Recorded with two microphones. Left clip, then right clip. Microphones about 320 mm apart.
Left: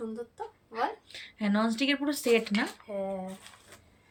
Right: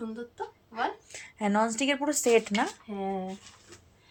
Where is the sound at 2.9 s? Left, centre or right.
Left.